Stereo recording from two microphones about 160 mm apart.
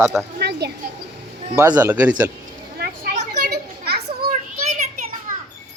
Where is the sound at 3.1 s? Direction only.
50° right (ahead or behind).